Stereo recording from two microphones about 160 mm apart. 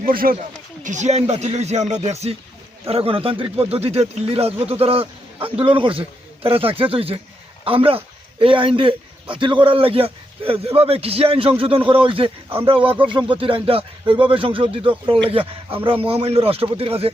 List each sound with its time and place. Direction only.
0.0 s speech: 65° right (ahead or behind)
0.8 s a man's voice: 50° right (ahead or behind)